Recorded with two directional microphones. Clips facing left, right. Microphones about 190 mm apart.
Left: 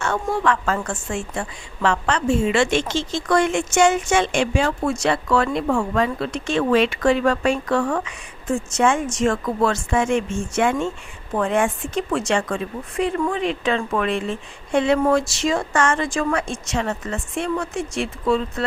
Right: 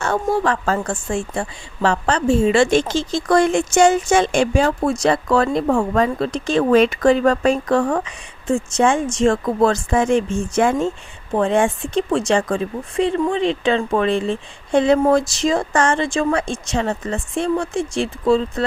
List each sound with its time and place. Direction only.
0.0 s a woman's voice: 35° right (ahead or behind)